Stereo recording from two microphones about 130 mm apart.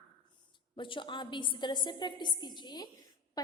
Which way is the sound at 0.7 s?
40° left (ahead or behind).